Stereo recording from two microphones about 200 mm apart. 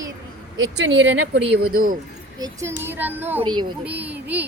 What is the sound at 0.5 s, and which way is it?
Speech, 75° right (ahead or behind).